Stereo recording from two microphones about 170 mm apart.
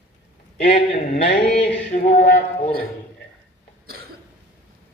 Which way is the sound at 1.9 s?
45° left (ahead or behind).